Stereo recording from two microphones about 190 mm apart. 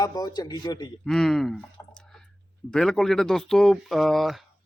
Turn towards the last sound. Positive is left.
turn(degrees=0)  # may be behind; listen again after turning